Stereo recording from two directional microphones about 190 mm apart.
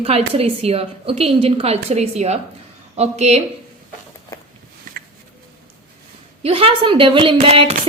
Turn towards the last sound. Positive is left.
turn(degrees=-30)  # may be behind; listen again after turning